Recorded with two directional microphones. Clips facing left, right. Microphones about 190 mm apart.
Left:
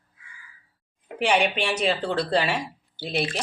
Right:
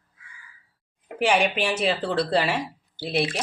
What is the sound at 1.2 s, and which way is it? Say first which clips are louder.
Speech: right 1 dB; 5° right (ahead or behind).